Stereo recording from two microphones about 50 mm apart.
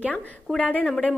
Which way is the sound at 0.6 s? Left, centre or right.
Left.